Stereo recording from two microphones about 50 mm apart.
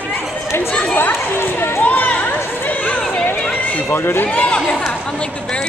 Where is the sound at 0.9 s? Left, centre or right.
Left.